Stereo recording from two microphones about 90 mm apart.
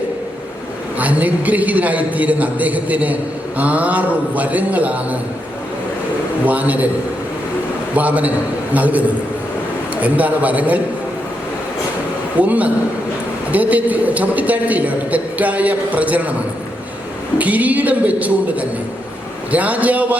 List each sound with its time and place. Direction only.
0.9 s a man's voice: 15° right (ahead or behind)
6.4 s a man's voice: 15° right (ahead or behind)
7.9 s a man's voice: 15° right (ahead or behind)
12.4 s a man's voice: 15° right (ahead or behind)
17.3 s a man's voice: 15° right (ahead or behind)
19.5 s a man's voice: 15° right (ahead or behind)